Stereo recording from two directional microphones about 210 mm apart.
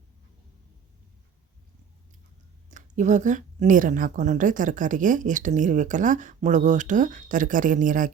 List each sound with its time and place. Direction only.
2.6 s a woman's voice: 35° right (ahead or behind)